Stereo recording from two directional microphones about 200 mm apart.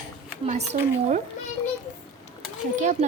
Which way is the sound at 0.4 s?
35° right (ahead or behind).